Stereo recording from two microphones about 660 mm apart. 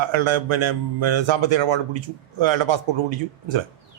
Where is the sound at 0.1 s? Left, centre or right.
Right.